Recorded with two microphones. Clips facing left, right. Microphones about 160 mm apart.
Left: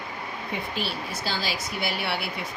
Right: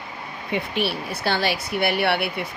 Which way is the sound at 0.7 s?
65° right (ahead or behind).